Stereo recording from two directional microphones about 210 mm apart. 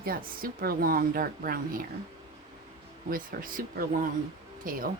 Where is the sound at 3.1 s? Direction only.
45° right (ahead or behind).